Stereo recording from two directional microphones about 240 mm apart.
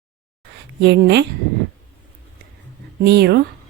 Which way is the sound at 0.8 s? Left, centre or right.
Right.